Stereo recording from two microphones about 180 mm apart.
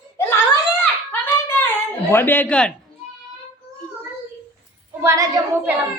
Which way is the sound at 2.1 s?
10° left (ahead or behind).